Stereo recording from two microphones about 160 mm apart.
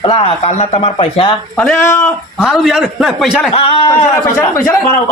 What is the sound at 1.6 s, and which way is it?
Speech, 10° left (ahead or behind).